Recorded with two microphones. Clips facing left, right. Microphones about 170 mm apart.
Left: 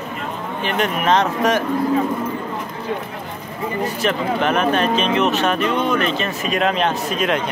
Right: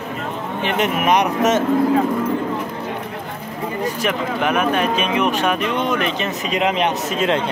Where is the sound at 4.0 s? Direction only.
10° right (ahead or behind); by 7.5 s 25° right (ahead or behind).